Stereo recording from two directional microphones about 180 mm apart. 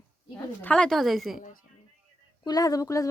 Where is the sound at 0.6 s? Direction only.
5° left (ahead or behind).